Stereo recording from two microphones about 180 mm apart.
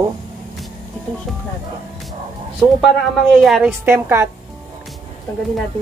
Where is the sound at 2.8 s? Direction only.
Centre (ahead or behind).